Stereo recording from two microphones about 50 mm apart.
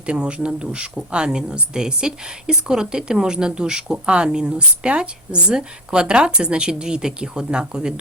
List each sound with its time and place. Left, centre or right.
0.0 s speech: right